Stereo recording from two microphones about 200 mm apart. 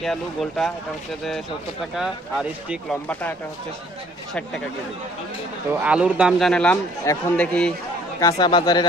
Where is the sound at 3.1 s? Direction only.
10° left (ahead or behind).